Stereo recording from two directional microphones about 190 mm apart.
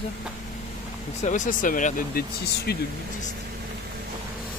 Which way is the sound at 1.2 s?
45° left (ahead or behind).